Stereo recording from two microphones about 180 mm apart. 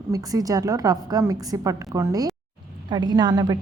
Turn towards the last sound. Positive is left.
turn(degrees=-20)  # may be behind; listen again after turning